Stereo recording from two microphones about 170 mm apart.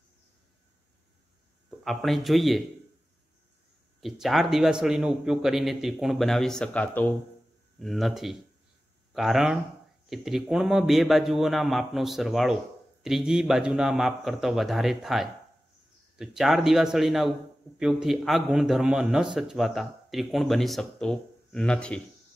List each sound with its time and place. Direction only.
1.9 s a man's voice: centre (ahead or behind)
4.0 s a man's voice: centre (ahead or behind)
7.8 s a man's voice: centre (ahead or behind)